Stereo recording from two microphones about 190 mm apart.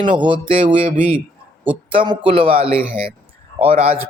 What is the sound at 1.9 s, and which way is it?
Speech, 25° right (ahead or behind).